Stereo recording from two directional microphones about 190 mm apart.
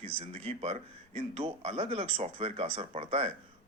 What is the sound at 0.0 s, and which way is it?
Speech, 35° right (ahead or behind).